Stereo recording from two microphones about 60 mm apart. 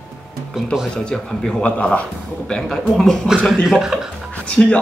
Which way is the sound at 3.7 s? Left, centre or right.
Centre.